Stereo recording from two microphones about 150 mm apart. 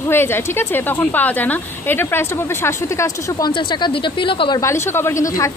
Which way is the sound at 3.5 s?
35° left (ahead or behind).